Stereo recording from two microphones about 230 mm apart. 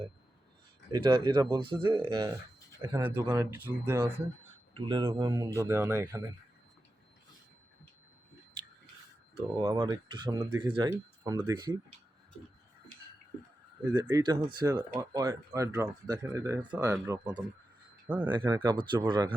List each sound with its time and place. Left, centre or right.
0.9 s speech: centre
9.6 s speech: centre
13.9 s speech: centre
18.4 s speech: centre